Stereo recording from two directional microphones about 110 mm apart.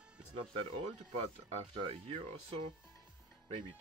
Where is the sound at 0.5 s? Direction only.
60° right (ahead or behind).